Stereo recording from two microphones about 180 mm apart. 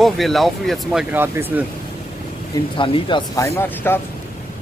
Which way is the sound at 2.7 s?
30° left (ahead or behind).